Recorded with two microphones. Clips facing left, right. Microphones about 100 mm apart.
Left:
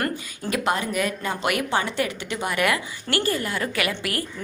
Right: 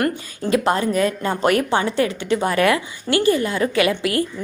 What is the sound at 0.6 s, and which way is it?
A woman's voice, 35° right (ahead or behind).